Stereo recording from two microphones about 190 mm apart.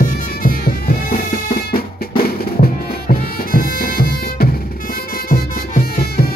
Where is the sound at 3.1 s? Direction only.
50° left (ahead or behind).